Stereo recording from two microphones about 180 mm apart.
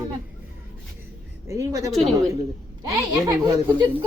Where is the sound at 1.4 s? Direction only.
20° right (ahead or behind).